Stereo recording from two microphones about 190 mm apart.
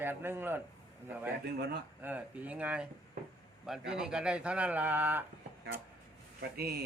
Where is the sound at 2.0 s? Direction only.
10° right (ahead or behind).